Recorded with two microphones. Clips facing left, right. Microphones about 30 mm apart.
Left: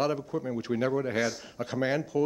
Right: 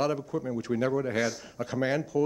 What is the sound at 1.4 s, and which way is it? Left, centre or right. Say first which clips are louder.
Speech: even; centre.